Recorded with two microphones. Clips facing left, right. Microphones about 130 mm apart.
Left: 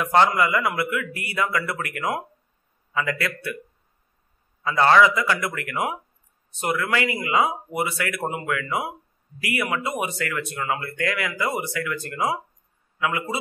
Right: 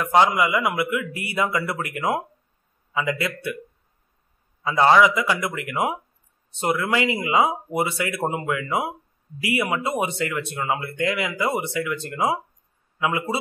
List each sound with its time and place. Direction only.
0.1 s speech: 15° right (ahead or behind)
4.6 s speech: 15° right (ahead or behind)